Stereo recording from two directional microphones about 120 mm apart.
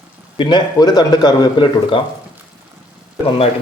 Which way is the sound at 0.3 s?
40° left (ahead or behind).